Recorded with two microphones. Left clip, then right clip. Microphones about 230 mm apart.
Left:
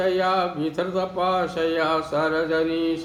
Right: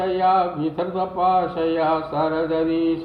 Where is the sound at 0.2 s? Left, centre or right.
Left.